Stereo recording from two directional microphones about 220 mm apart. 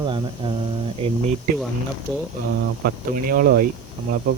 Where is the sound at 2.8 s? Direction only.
40° right (ahead or behind).